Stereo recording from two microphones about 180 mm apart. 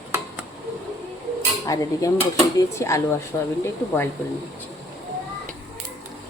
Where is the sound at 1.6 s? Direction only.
20° left (ahead or behind).